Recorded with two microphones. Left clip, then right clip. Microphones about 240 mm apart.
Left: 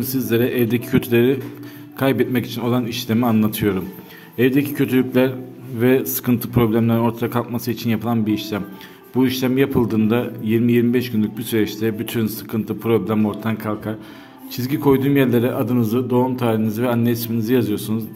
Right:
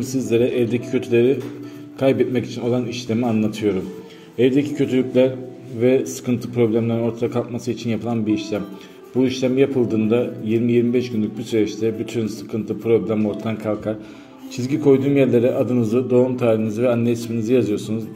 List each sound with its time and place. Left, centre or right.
0.0 s a man's voice: left